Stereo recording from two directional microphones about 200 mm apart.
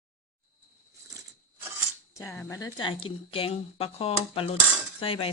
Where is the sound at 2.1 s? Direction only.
15° left (ahead or behind).